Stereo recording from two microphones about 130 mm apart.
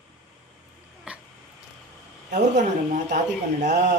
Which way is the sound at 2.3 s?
65° right (ahead or behind).